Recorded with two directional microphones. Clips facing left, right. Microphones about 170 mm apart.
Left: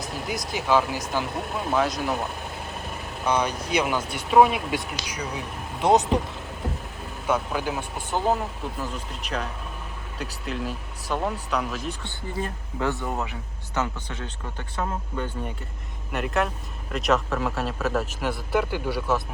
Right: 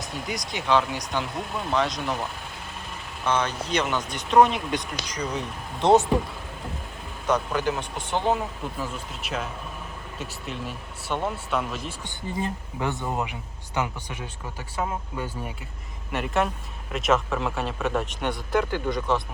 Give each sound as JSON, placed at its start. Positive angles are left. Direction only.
{"t": 0.0, "sound": "speech", "side_deg": 0}
{"t": 3.2, "sound": "speech", "side_deg": 10}
{"t": 7.3, "sound": "speech", "side_deg": 5}
{"t": 12.4, "sound": "speech", "side_deg": -20}